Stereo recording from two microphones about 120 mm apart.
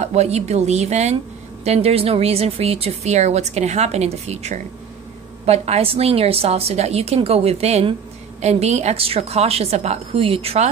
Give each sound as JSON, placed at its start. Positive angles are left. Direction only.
{"t": 0.0, "sound": "a woman's voice", "side_deg": -65}